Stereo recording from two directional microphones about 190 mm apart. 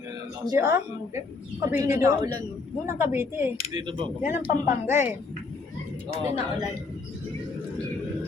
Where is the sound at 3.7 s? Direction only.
25° right (ahead or behind).